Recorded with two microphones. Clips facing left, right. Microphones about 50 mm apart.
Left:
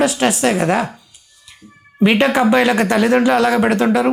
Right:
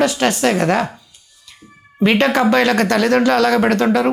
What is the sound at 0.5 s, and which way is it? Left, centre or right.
Speech, centre.